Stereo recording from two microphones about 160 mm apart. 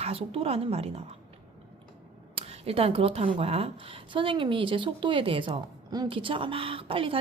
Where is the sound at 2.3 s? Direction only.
40° right (ahead or behind).